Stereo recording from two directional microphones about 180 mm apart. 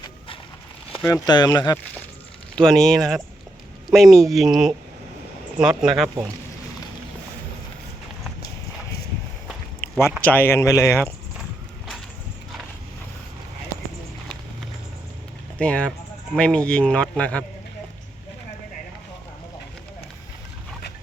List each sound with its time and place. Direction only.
1.0 s speech: 20° left (ahead or behind)
2.6 s a man's voice: 5° left (ahead or behind)
10.0 s a man's voice: 10° left (ahead or behind)
15.5 s a man's voice: 5° left (ahead or behind)